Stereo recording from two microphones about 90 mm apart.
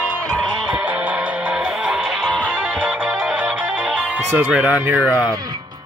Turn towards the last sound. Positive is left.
turn(degrees=-15)  # may be behind; listen again after turning